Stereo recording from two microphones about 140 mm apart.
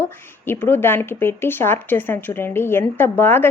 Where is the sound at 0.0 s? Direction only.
15° left (ahead or behind).